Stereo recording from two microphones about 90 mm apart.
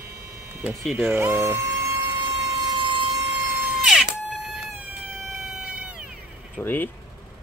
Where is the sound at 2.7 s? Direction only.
65° right (ahead or behind).